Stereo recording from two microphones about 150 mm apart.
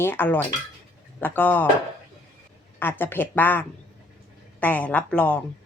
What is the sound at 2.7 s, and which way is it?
Speech, 15° left (ahead or behind).